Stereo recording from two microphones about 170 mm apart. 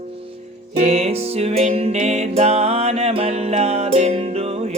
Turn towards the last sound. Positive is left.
turn(degrees=-35)  # may be behind; listen again after turning